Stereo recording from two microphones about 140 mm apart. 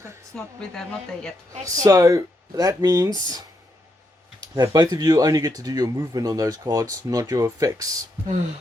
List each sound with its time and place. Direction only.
0.3 s speech: 5° left (ahead or behind)
1.6 s speech: 25° right (ahead or behind)
4.5 s speech: 25° right (ahead or behind)